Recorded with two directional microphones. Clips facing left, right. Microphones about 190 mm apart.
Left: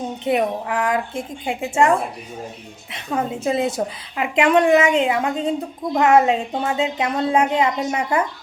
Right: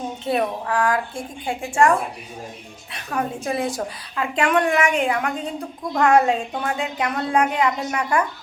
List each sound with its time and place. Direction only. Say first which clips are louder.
0.3 s a woman's voice: left 2 dB; 20° left (ahead or behind)